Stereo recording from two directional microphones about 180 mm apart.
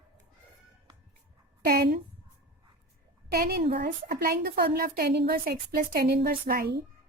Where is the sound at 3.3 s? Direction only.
60° right (ahead or behind).